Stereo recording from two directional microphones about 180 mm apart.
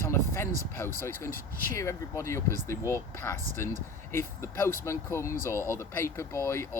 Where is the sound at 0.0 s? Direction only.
15° left (ahead or behind).